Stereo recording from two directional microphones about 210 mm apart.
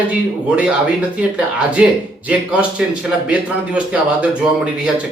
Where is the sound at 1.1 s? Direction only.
5° right (ahead or behind).